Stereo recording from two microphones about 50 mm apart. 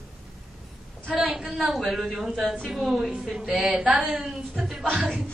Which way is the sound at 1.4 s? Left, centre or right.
Centre.